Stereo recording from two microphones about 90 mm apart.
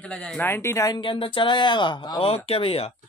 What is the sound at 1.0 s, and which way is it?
Speech, 70° left (ahead or behind).